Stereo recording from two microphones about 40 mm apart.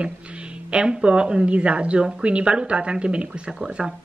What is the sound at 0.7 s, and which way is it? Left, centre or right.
Speech, right.